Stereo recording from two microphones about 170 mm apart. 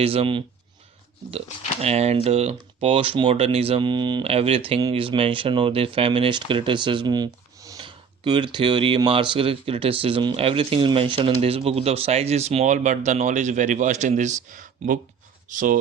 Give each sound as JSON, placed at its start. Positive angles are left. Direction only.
{"t": 0.0, "sound": "speech", "side_deg": -35}
{"t": 1.8, "sound": "speech", "side_deg": -40}